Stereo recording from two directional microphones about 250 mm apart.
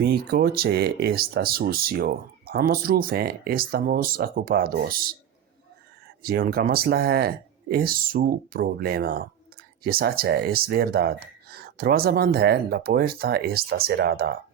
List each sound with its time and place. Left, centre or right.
0.0 s speech: right
6.2 s speech: right